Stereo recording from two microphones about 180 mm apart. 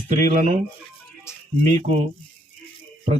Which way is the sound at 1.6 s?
40° right (ahead or behind).